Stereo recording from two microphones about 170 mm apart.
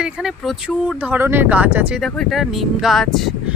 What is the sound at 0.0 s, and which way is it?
Speech, 5° right (ahead or behind).